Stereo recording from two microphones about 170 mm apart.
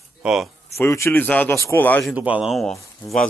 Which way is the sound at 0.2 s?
5° right (ahead or behind).